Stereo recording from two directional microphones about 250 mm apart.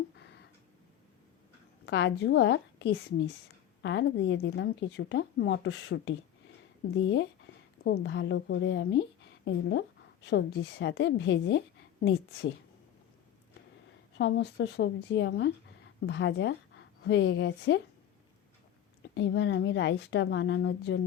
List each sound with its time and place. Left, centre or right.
1.9 s speech: left
14.2 s speech: left
19.1 s speech: left